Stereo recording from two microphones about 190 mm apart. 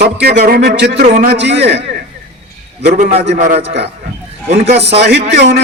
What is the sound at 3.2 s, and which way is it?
Speech, 35° right (ahead or behind).